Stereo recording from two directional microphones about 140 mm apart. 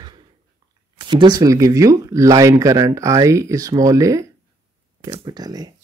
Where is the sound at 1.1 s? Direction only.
30° right (ahead or behind).